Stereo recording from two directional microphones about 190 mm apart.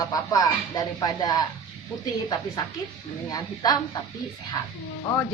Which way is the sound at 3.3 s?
20° left (ahead or behind).